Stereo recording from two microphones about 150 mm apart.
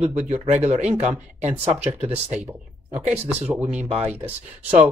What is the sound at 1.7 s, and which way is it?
Speech, 10° right (ahead or behind).